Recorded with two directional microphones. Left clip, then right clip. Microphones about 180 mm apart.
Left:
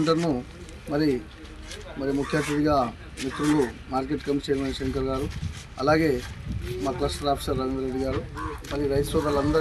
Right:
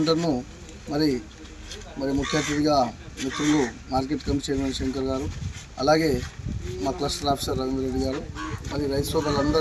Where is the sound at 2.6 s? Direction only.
Centre (ahead or behind).